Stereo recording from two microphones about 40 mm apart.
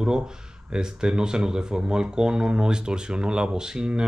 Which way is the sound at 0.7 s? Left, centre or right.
Right.